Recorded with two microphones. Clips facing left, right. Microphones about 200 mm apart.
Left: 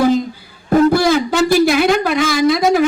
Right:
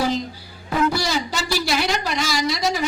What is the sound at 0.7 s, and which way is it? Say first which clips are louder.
A man's voice: left 10 dB; 50° left (ahead or behind).